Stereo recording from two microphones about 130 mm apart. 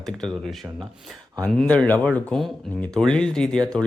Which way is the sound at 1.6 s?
5° left (ahead or behind).